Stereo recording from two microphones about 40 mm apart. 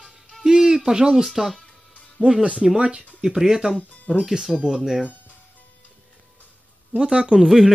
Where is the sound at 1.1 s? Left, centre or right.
Centre.